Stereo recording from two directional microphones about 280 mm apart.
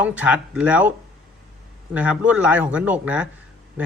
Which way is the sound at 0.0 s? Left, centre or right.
Centre.